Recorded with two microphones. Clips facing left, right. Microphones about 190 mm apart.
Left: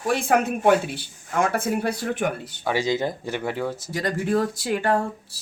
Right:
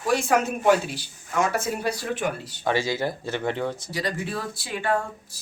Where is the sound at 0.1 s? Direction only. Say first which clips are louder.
Left 1 dB; 55° left (ahead or behind).